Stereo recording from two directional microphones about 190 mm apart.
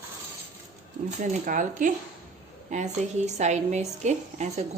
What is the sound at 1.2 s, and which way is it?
A woman's voice, 45° right (ahead or behind).